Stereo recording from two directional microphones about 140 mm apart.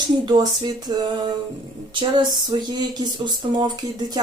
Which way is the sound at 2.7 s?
30° right (ahead or behind).